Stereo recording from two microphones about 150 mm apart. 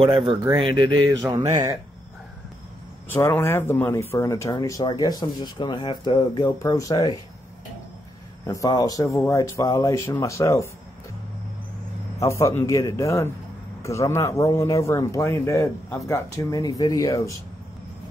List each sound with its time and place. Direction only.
0.0 s speech: 35° right (ahead or behind)
1.1 s mantra: 20° right (ahead or behind)
3.1 s speech: 15° left (ahead or behind)
8.5 s speech: 25° left (ahead or behind)
12.2 s speech: 20° left (ahead or behind)